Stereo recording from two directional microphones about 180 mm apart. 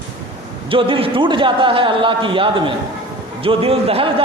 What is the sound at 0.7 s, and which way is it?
A man's voice, 30° right (ahead or behind).